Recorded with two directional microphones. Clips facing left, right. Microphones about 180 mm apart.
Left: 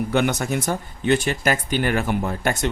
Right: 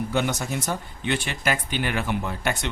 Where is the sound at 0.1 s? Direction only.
60° left (ahead or behind).